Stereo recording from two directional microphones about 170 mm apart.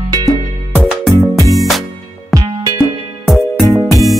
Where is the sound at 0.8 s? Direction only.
5° right (ahead or behind).